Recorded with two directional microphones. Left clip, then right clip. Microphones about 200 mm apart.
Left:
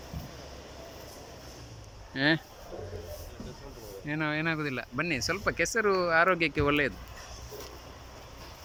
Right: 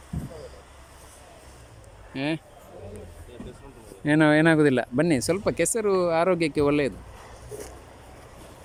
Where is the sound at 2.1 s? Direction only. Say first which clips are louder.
Left 3 dB; 5° right (ahead or behind).